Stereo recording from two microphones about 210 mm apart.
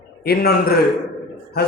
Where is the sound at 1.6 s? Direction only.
50° left (ahead or behind).